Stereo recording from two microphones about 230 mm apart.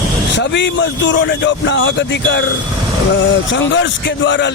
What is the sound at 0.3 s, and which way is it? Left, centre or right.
A man's voice, left.